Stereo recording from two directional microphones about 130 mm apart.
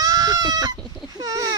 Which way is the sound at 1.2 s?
30° right (ahead or behind).